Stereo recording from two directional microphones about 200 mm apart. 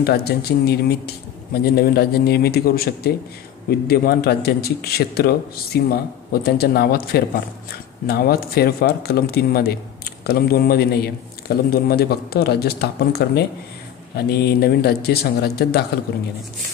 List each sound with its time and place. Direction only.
0.0 s a man's voice: 50° left (ahead or behind)